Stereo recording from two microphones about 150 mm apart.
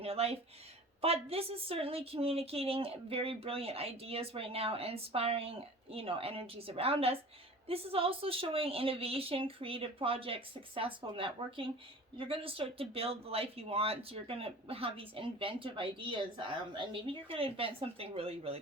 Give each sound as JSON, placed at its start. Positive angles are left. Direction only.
{"t": 0.0, "sound": "speech", "side_deg": -40}